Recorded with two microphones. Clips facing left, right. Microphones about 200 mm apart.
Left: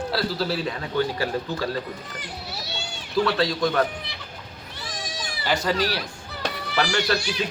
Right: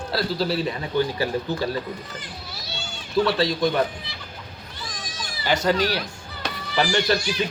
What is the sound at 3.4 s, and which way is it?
Speech, centre (ahead or behind).